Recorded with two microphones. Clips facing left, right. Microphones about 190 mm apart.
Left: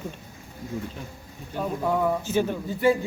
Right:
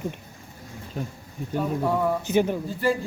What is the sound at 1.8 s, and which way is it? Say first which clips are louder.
Speech: left 1 dB; centre (ahead or behind).